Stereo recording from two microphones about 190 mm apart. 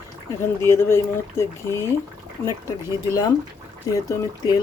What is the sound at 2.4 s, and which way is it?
Speech, 15° left (ahead or behind).